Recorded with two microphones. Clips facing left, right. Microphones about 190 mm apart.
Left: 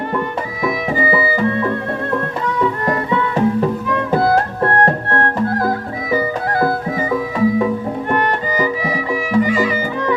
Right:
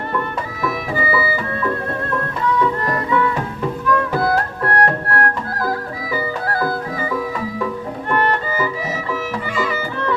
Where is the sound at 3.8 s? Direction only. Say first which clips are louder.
Left 2 dB; 25° left (ahead or behind).